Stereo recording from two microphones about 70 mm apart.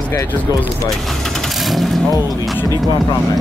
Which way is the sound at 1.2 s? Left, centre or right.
Centre.